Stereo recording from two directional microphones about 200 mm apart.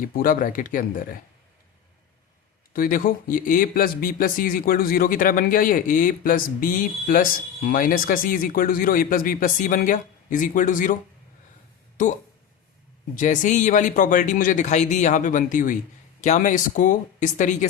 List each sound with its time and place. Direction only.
0.0 s speech: 45° left (ahead or behind)
2.7 s speech: 45° left (ahead or behind)
13.1 s speech: 40° left (ahead or behind)